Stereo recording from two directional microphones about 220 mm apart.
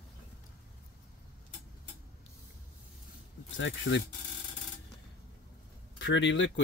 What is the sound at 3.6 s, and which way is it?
Speech, 60° left (ahead or behind).